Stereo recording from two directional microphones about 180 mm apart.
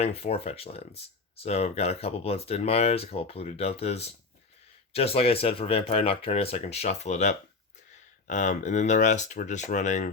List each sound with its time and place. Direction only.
0.0 s speech: 35° left (ahead or behind)